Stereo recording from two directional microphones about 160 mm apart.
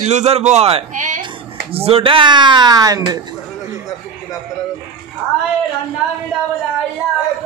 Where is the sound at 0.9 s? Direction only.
50° right (ahead or behind).